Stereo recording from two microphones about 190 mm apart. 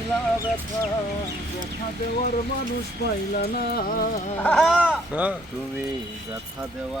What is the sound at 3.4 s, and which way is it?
Music, 50° left (ahead or behind).